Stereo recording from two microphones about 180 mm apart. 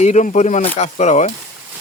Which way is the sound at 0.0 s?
40° left (ahead or behind).